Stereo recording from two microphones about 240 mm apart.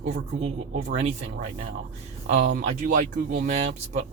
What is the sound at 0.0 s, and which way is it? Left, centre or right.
Speech, right.